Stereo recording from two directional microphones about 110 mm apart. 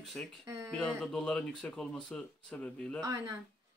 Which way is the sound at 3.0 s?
35° right (ahead or behind).